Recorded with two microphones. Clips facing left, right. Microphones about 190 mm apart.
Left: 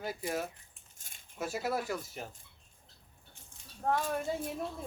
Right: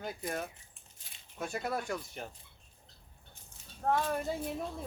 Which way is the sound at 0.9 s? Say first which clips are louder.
Left 2 dB; 50° left (ahead or behind).